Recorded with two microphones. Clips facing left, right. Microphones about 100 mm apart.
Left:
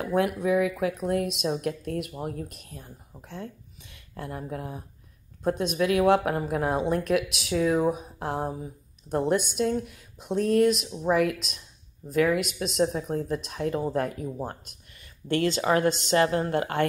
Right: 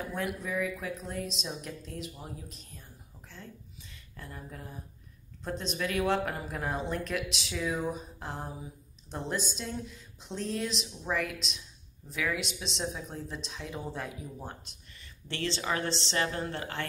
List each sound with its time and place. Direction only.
0.1 s speech: 55° left (ahead or behind)
7.5 s speech: 45° left (ahead or behind)
12.2 s speech: 45° left (ahead or behind)
12.8 s speech: 65° left (ahead or behind); by 16.8 s 40° left (ahead or behind)